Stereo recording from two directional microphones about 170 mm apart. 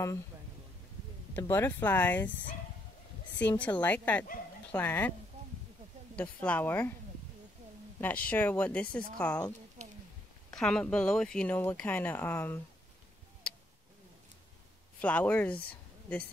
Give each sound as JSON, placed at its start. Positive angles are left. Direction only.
{"t": 1.3, "sound": "speech", "side_deg": 15}
{"t": 3.3, "sound": "speech", "side_deg": 10}
{"t": 6.1, "sound": "speech", "side_deg": 10}
{"t": 8.0, "sound": "speech", "side_deg": 10}
{"t": 9.8, "sound": "a sound", "side_deg": -45}
{"t": 10.5, "sound": "speech", "side_deg": 5}
{"t": 15.0, "sound": "speech", "side_deg": 10}